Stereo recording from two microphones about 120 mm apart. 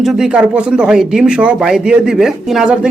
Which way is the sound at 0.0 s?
5° right (ahead or behind).